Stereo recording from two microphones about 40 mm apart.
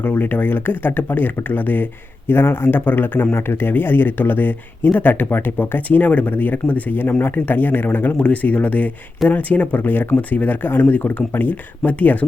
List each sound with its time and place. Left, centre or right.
0.0 s speech: left
2.8 s speech: left
3.3 s speech: left
5.5 s speech: left
6.1 s speech: left
6.3 s speech: left
6.9 s speech: left
7.3 s speech: left
8.2 s speech: left
11.0 s speech: left
11.3 s speech: left